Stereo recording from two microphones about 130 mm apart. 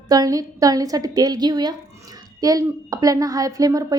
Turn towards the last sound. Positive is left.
turn(degrees=-25)  # may be behind; listen again after turning